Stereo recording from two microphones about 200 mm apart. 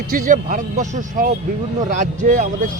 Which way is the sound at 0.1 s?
40° right (ahead or behind).